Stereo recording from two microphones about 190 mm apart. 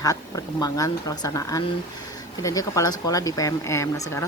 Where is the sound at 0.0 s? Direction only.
20° left (ahead or behind).